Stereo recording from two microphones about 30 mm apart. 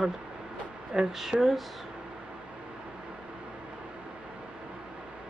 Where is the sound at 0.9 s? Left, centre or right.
Centre.